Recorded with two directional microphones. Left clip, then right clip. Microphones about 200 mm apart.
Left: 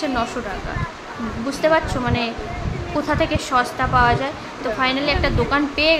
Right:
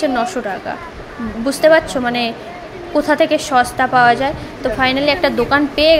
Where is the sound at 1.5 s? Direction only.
25° right (ahead or behind).